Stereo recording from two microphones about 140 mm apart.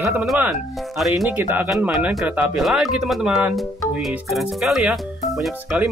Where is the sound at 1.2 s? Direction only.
15° right (ahead or behind).